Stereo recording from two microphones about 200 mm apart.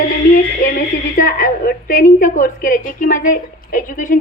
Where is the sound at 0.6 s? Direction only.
40° left (ahead or behind).